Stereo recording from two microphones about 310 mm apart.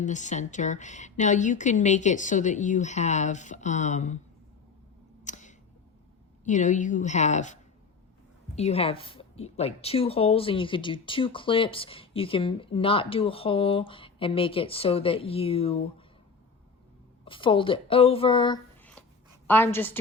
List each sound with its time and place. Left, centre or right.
0.0 s speech: left
5.2 s a sound: left
6.4 s a woman's voice: left
17.2 s a woman's voice: centre